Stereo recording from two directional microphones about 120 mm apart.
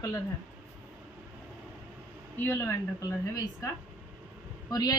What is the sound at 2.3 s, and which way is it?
Speech, 15° left (ahead or behind).